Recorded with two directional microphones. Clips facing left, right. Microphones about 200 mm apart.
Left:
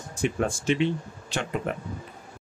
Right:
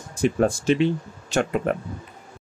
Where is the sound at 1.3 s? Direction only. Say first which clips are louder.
Right 7 dB; 55° right (ahead or behind).